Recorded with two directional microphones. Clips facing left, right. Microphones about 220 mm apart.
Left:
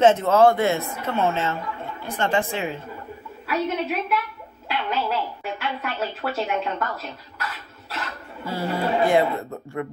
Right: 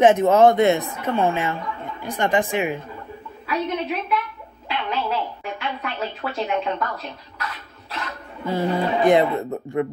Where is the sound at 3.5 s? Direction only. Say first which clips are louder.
Even; 5° left (ahead or behind).